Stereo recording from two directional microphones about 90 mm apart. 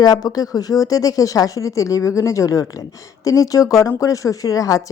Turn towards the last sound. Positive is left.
turn(degrees=40)  # may be behind; listen again after turning